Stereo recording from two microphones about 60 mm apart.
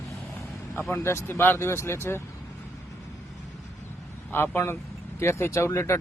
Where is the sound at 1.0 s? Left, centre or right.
Left.